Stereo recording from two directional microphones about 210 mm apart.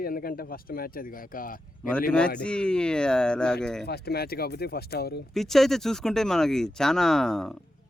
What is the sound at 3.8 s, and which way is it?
Speech, 50° left (ahead or behind).